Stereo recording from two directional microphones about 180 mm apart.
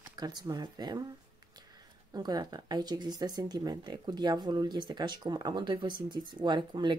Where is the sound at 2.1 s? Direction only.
20° right (ahead or behind).